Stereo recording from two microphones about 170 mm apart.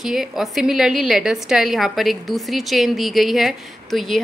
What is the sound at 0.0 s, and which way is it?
A woman's voice, centre (ahead or behind).